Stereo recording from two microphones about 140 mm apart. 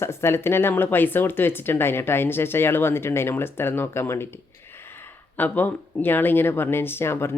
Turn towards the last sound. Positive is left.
turn(degrees=15)  # may be behind; listen again after turning